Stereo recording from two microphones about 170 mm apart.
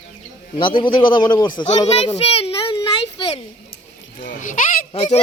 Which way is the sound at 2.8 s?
25° left (ahead or behind).